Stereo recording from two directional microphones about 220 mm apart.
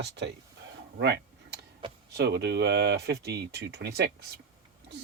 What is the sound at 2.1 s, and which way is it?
Speech, 50° right (ahead or behind).